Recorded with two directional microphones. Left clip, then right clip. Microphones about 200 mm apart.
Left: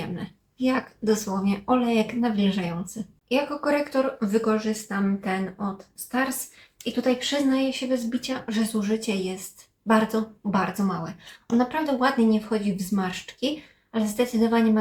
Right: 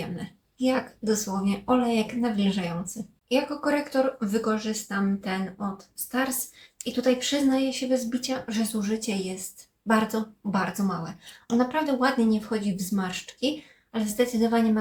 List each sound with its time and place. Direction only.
0.0 s a woman's voice: centre (ahead or behind)